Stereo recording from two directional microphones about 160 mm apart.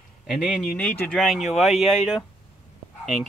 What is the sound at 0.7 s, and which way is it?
Speech, 10° left (ahead or behind).